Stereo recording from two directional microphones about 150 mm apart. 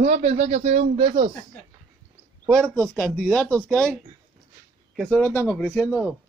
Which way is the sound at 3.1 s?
Centre (ahead or behind).